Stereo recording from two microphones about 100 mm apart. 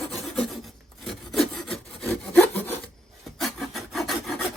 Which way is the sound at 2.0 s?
20° left (ahead or behind).